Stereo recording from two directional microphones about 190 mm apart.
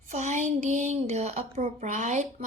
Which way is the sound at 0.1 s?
40° right (ahead or behind).